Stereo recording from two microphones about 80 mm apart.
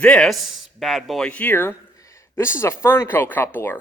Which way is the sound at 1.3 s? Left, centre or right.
Centre.